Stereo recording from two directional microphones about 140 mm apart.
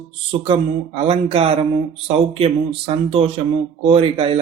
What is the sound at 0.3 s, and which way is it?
Speech, 40° right (ahead or behind).